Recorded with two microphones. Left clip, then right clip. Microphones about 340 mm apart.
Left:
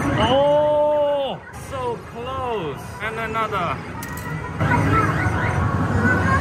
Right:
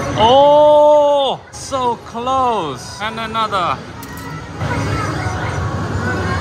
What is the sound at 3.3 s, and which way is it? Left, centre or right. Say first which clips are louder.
Speech: right 7 dB; centre.